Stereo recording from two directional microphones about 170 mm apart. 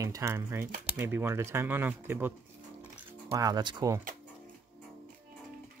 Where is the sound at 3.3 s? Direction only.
20° right (ahead or behind).